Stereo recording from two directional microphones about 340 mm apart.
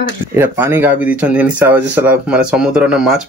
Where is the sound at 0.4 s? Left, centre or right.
Centre.